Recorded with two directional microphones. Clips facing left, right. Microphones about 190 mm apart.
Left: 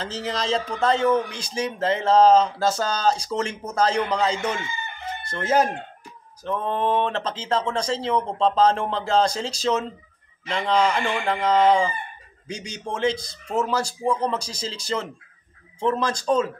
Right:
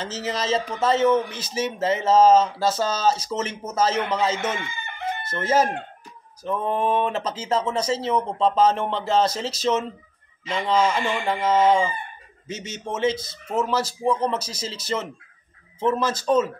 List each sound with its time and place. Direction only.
0.1 s a man's voice: 5° right (ahead or behind)
4.6 s chicken: 60° right (ahead or behind)
5.2 s chicken: 5° right (ahead or behind)
6.4 s a man's voice: 5° right (ahead or behind)